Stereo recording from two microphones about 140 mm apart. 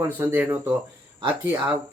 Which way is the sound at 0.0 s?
15° right (ahead or behind).